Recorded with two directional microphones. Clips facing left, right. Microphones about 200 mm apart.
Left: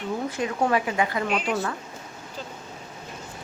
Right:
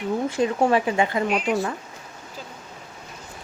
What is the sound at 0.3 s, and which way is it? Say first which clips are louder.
Speech: right 4 dB; 30° right (ahead or behind).